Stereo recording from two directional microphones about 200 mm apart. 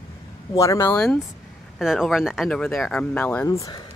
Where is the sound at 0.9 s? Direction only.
5° left (ahead or behind).